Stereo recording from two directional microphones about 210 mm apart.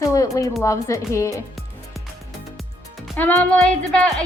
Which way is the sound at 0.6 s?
15° left (ahead or behind).